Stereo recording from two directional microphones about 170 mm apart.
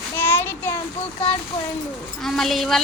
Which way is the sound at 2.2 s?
Centre (ahead or behind).